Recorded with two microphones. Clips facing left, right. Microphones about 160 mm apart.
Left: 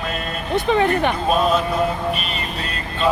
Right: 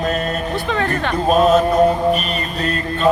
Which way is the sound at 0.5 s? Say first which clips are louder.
Left 8 dB; 20° left (ahead or behind).